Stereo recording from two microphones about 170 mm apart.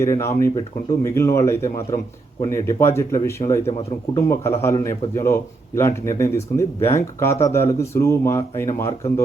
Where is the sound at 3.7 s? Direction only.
35° left (ahead or behind).